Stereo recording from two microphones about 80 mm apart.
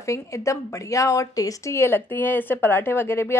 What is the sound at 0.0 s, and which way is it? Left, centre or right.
Speech, left.